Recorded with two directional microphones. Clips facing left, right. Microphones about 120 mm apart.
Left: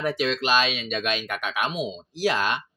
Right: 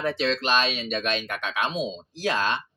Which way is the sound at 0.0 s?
30° right (ahead or behind).